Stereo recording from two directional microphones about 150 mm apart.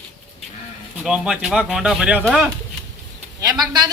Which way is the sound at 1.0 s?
5° right (ahead or behind).